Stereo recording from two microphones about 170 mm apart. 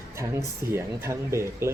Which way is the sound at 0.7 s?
15° right (ahead or behind).